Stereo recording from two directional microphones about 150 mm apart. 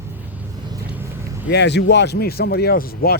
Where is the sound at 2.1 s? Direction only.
90° left.